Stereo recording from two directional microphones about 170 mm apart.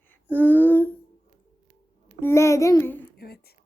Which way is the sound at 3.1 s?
65° left (ahead or behind).